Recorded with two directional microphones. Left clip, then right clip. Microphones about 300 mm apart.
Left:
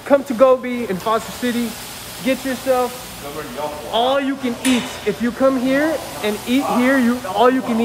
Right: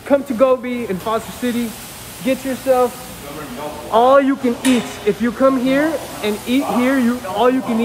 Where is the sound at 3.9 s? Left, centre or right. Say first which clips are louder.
Right 6 dB; centre.